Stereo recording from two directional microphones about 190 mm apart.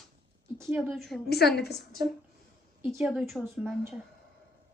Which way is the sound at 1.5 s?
60° left (ahead or behind).